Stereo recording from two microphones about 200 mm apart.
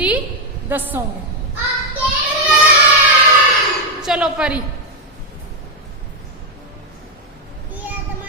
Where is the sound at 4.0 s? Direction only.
5° right (ahead or behind).